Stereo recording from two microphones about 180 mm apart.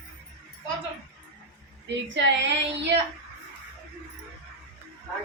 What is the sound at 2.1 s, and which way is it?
Child singing, 80° right.